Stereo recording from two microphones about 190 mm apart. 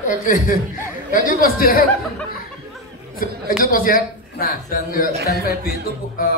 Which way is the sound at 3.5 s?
45° left (ahead or behind).